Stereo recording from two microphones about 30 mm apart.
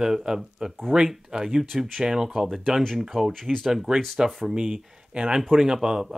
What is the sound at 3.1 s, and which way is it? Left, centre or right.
Speech, centre.